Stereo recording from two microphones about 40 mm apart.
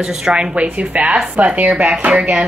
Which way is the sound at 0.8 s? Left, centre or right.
Right.